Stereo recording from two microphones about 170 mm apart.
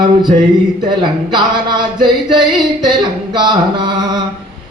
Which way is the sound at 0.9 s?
25° right (ahead or behind).